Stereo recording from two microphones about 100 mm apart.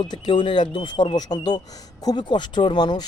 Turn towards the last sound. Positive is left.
turn(degrees=50)  # may be behind; listen again after turning